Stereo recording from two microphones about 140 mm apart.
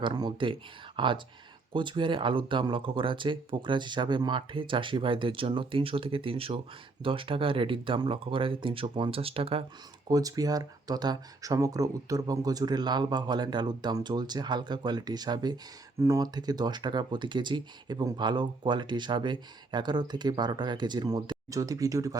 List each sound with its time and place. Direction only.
0.0 s speech: 30° right (ahead or behind)
10.1 s speech: 25° right (ahead or behind)